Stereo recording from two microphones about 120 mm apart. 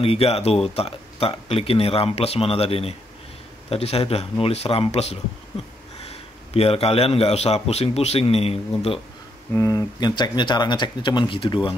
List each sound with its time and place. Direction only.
0.0 s a man's voice: 55° left (ahead or behind)
6.5 s a man's voice: 55° left (ahead or behind)
9.5 s speech: 25° left (ahead or behind); by 11.7 s 45° left (ahead or behind)